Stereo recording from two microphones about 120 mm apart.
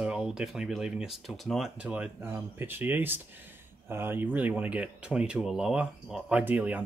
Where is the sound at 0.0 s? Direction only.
5° right (ahead or behind).